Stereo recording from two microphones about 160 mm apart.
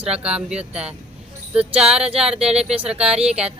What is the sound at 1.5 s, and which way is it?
Speech, 5° right (ahead or behind).